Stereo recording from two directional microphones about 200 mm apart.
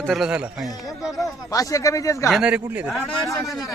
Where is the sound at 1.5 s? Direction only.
15° left (ahead or behind).